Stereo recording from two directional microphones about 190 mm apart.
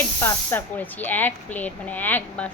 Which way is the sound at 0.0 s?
10° left (ahead or behind).